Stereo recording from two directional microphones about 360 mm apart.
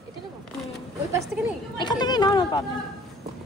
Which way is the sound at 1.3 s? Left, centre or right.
Centre.